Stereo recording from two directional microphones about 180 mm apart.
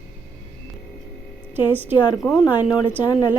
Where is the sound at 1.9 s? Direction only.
25° left (ahead or behind).